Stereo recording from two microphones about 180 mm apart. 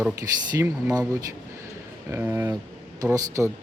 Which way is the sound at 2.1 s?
15° right (ahead or behind).